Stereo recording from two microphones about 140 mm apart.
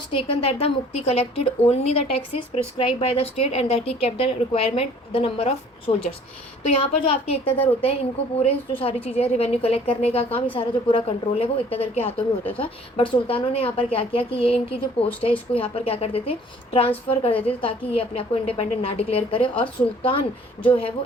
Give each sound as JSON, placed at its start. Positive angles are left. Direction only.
{"t": 0.1, "sound": "a woman's voice", "side_deg": 40}